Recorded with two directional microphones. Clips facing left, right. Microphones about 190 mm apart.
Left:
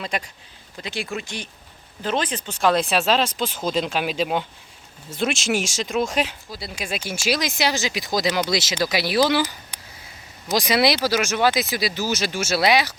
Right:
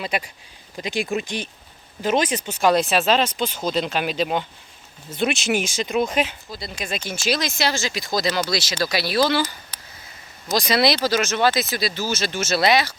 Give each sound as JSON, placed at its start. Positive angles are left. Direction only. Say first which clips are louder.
{"t": 0.0, "sound": "speech", "louder": "right 2 dB", "side_deg": -5}